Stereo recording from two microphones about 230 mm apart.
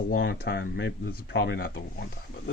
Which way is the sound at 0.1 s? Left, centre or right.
Left.